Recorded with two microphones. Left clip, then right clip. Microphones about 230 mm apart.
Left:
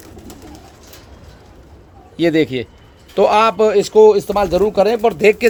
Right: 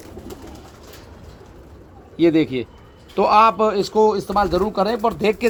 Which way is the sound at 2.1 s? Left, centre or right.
Left.